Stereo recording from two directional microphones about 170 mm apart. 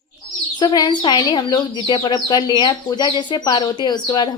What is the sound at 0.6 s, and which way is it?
Speech, 25° left (ahead or behind).